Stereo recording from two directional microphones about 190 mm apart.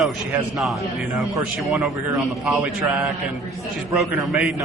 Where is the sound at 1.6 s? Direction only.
Centre (ahead or behind).